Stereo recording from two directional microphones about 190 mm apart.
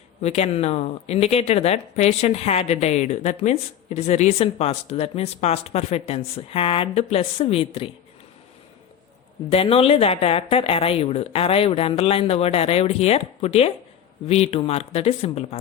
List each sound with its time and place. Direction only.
0.2 s speech: 35° left (ahead or behind)
9.5 s speech: 30° left (ahead or behind)